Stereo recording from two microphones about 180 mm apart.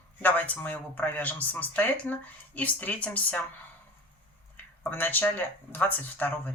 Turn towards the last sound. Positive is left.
turn(degrees=10)  # may be behind; listen again after turning